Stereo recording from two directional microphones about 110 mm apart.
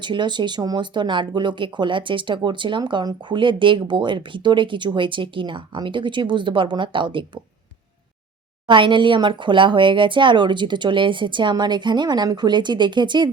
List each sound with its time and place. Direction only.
0.0 s speech: 45° right (ahead or behind)
8.6 s speech: 50° right (ahead or behind)